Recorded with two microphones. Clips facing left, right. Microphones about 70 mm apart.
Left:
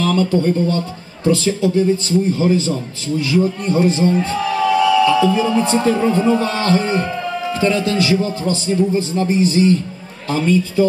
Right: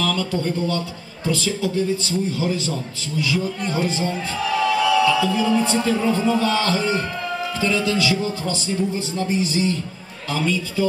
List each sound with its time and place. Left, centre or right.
0.0 s a man's voice: left